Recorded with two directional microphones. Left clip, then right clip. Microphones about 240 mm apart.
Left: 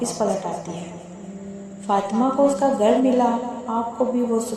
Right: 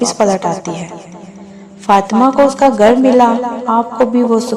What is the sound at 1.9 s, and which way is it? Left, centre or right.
A woman's voice, right.